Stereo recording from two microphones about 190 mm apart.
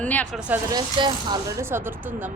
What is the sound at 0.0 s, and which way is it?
Speech, 10° left (ahead or behind).